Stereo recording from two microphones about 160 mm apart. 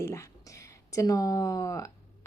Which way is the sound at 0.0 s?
15° left (ahead or behind).